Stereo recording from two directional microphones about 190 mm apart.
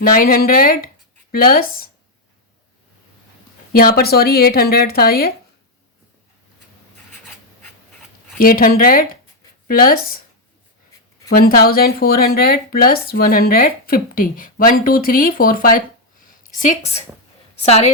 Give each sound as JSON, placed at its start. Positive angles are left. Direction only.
{"t": 0.0, "sound": "speech", "side_deg": 50}
{"t": 3.7, "sound": "speech", "side_deg": 50}
{"t": 8.4, "sound": "speech", "side_deg": 50}
{"t": 11.3, "sound": "a woman's voice", "side_deg": 50}